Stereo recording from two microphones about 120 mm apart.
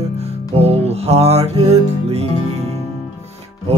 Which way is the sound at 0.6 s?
60° right (ahead or behind).